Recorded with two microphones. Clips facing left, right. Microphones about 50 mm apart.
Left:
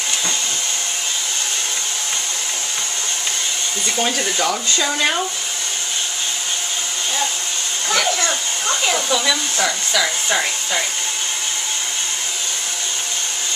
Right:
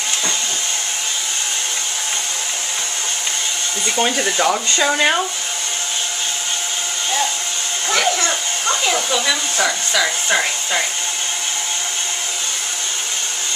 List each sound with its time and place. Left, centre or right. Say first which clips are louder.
3.8 s speech: right 3 dB; centre
7.9 s hair dryer: right 1 dB; centre